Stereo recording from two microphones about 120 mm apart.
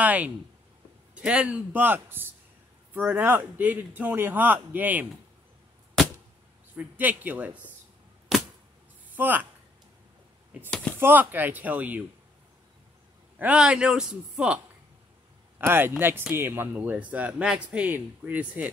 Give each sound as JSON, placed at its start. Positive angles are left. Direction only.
{"t": 0.0, "sound": "speech", "side_deg": -15}
{"t": 6.7, "sound": "speech", "side_deg": -15}
{"t": 9.1, "sound": "speech", "side_deg": -15}
{"t": 10.7, "sound": "a sound", "side_deg": 10}
{"t": 11.0, "sound": "speech", "side_deg": -15}
{"t": 13.4, "sound": "speech", "side_deg": -10}
{"t": 15.6, "sound": "speech", "side_deg": -20}